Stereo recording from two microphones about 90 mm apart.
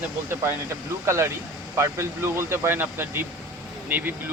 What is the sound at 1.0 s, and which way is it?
Speech, 30° right (ahead or behind).